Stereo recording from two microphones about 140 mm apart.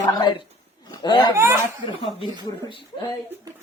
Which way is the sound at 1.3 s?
20° right (ahead or behind).